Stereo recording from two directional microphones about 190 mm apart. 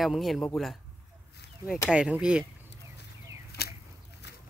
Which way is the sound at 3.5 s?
55° left (ahead or behind).